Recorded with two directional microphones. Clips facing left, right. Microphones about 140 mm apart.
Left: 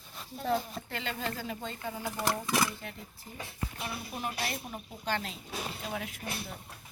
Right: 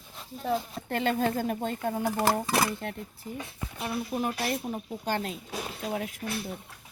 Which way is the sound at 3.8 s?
45° right (ahead or behind).